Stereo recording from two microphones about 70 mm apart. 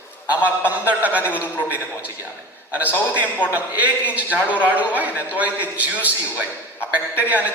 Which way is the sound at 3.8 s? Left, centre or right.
Right.